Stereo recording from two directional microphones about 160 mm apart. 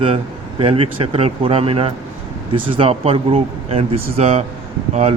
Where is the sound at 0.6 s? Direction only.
35° right (ahead or behind).